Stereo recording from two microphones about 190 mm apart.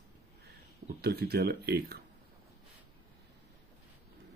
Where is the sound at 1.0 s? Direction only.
55° right (ahead or behind).